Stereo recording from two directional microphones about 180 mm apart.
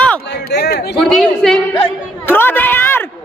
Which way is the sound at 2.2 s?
10° left (ahead or behind).